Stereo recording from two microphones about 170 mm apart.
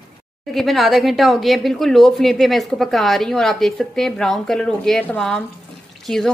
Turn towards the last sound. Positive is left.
turn(degrees=5)  # may be behind; listen again after turning